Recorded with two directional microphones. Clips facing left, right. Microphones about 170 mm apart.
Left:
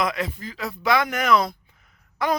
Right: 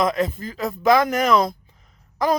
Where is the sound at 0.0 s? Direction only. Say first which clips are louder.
Right 5 dB; 45° right (ahead or behind).